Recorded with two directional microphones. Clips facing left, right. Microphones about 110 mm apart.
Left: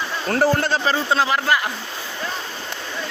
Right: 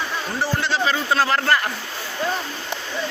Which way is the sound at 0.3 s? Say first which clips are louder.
Left 7 dB; 50° left (ahead or behind).